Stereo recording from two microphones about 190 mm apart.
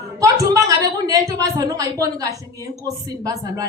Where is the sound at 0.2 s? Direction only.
15° right (ahead or behind).